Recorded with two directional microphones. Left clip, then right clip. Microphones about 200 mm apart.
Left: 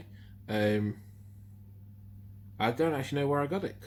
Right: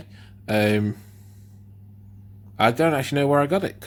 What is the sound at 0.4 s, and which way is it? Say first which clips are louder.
Speech: right 8 dB; 40° right (ahead or behind).